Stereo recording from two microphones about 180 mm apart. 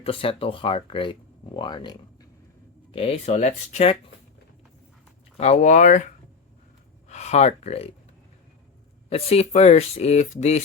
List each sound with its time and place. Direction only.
0.0 s speech: 30° left (ahead or behind)
5.4 s speech: 40° left (ahead or behind)
7.1 s speech: 40° left (ahead or behind)
9.0 s speech: 35° left (ahead or behind)